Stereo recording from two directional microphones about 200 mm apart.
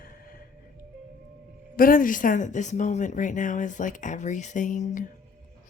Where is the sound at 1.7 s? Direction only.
45° left (ahead or behind).